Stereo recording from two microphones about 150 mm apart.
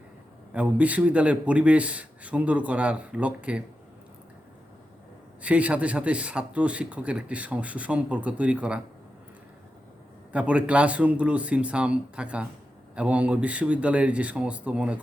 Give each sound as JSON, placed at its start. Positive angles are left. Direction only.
{"t": 0.5, "sound": "a man's voice", "side_deg": -10}
{"t": 5.4, "sound": "a man's voice", "side_deg": -10}
{"t": 10.3, "sound": "a man's voice", "side_deg": -10}